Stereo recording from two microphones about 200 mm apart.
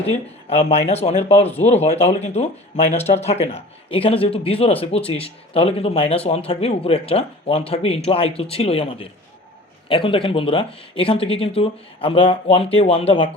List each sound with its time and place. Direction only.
0.0 s speech: 30° left (ahead or behind)